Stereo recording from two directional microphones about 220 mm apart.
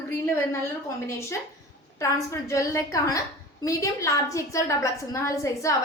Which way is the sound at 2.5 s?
15° left (ahead or behind).